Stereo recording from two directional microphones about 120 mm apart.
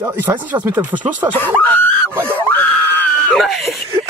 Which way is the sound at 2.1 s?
20° right (ahead or behind).